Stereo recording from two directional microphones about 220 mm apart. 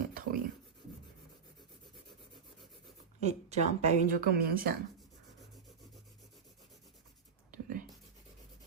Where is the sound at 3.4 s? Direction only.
30° right (ahead or behind).